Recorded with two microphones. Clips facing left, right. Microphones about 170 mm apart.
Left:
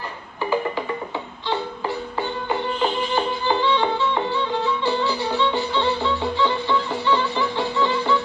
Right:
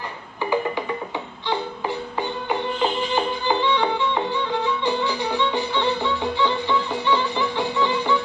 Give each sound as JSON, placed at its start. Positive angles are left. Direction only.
{"t": 1.5, "sound": "music", "side_deg": -15}